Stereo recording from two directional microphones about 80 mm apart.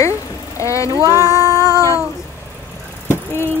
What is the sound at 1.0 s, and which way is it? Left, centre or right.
Female singing, right.